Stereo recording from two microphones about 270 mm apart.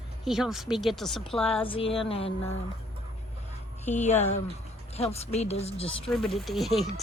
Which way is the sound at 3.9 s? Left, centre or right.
Left.